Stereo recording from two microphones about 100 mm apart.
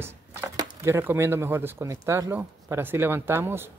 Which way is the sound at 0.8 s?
25° right (ahead or behind).